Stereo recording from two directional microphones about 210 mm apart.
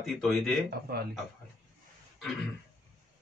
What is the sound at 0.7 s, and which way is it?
Speech, 50° right (ahead or behind).